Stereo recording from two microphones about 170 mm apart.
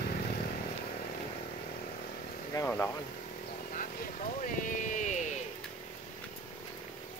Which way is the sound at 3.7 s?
55° left (ahead or behind).